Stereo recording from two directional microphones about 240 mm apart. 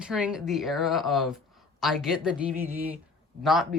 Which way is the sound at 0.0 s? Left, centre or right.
Centre.